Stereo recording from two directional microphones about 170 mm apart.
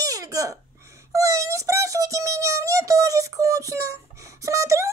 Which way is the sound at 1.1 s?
20° right (ahead or behind).